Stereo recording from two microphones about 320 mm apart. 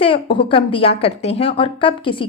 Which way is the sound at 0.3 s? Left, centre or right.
Centre.